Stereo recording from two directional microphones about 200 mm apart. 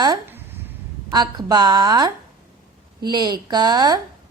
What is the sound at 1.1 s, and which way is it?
A woman's voice, 20° right (ahead or behind).